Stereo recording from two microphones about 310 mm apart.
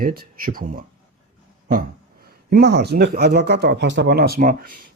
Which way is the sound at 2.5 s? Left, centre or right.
Right.